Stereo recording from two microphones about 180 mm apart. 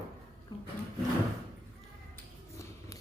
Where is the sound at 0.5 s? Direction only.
20° left (ahead or behind).